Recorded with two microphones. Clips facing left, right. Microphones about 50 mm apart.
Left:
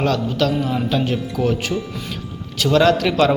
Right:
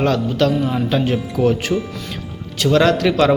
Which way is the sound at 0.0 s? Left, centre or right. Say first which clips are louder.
Right 2 dB; centre.